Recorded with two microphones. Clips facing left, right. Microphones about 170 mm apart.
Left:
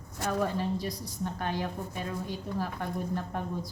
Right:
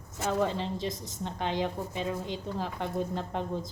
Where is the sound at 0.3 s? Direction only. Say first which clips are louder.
Right 1 dB; 25° right (ahead or behind).